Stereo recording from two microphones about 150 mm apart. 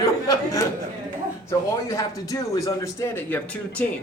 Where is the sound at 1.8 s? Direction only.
20° left (ahead or behind).